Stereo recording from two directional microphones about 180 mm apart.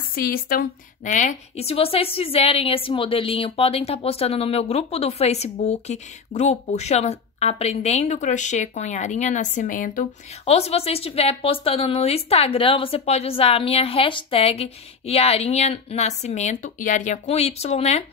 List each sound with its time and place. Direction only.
0.1 s a woman's voice: 55° left (ahead or behind)
10.4 s a woman's voice: 35° left (ahead or behind)